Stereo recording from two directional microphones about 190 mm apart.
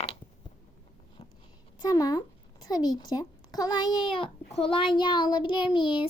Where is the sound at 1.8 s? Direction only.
20° left (ahead or behind).